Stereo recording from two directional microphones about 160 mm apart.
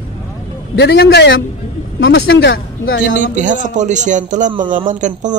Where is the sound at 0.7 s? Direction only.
90° left.